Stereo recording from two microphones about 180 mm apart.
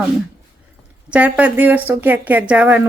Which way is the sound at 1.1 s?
10° right (ahead or behind).